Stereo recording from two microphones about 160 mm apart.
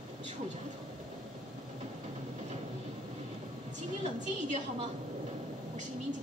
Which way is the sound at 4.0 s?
45° right (ahead or behind).